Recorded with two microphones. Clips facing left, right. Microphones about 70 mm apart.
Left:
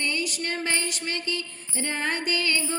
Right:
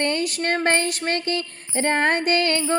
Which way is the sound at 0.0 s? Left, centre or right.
Right.